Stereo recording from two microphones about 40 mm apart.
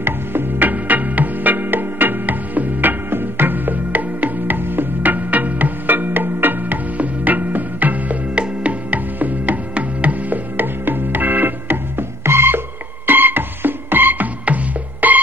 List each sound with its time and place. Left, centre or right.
0.0 s music: right
4.6 s music: right
7.0 s music: right
10.6 s music: right